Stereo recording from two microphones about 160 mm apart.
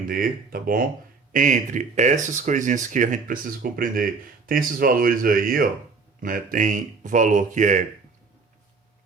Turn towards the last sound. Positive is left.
turn(degrees=-50)  # may be behind; listen again after turning